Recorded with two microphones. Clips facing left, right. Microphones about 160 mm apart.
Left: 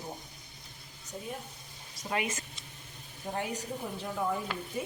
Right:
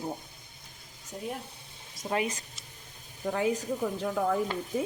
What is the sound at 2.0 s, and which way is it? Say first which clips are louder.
Speech: right 3 dB; 20° right (ahead or behind).